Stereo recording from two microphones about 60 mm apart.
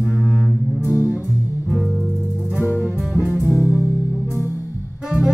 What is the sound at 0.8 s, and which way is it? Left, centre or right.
Music, left.